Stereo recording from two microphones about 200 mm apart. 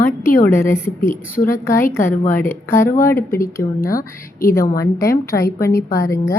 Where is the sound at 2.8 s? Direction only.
40° left (ahead or behind).